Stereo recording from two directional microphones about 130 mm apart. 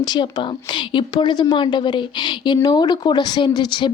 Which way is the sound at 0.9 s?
35° left (ahead or behind).